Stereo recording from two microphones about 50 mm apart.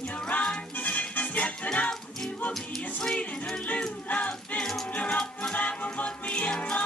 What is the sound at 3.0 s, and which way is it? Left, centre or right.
Music, left.